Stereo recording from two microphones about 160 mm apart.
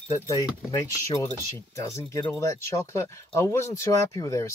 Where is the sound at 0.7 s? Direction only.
20° left (ahead or behind).